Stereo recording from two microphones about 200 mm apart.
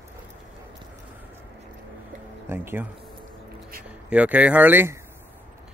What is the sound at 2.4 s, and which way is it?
Speech, 10° right (ahead or behind).